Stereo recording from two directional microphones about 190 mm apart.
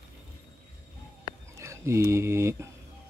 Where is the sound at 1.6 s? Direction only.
15° right (ahead or behind).